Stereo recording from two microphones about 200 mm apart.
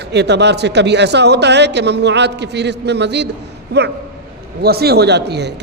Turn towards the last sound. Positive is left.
turn(degrees=-55)  # may be behind; listen again after turning